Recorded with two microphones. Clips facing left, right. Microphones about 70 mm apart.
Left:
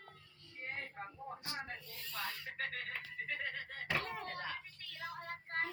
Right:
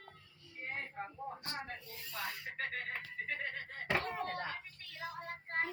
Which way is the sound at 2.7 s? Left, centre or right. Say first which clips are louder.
Right 2 dB; right.